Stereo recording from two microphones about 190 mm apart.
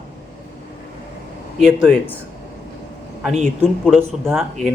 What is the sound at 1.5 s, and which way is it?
Speech, centre (ahead or behind).